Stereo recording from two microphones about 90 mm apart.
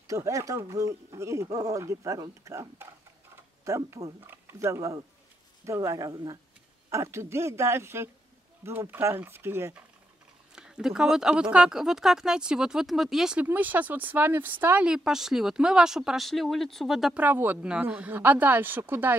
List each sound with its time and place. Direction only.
0.0 s speech: 40° right (ahead or behind)
6.9 s speech: 30° right (ahead or behind)
10.5 s speech: 5° right (ahead or behind)
13.4 s speech: 20° right (ahead or behind); by 17.1 s centre (ahead or behind)
17.1 s speech: 20° right (ahead or behind)